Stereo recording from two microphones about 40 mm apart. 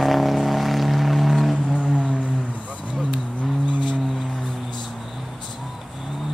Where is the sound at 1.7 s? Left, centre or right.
Right.